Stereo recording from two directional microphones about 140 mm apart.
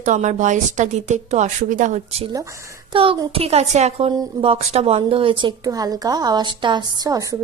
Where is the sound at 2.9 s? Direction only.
40° right (ahead or behind).